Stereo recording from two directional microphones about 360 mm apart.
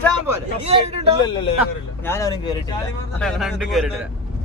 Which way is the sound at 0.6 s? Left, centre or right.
Centre.